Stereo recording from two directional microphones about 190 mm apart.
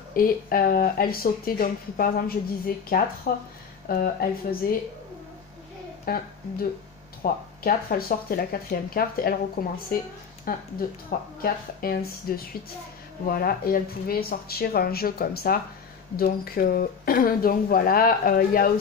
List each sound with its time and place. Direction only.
0.1 s speech: 50° left (ahead or behind)
6.0 s speech: 50° left (ahead or behind)